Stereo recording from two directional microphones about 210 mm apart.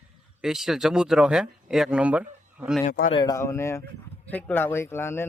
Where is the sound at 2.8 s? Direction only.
40° left (ahead or behind).